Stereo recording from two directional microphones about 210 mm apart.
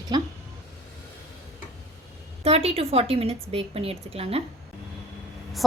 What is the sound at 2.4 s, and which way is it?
A woman's voice, 30° right (ahead or behind).